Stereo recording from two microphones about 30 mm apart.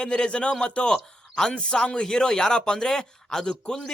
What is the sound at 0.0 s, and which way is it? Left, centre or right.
A man's voice, left.